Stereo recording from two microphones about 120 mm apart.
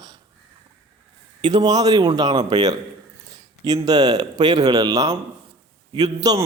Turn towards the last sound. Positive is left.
turn(degrees=-35)  # may be behind; listen again after turning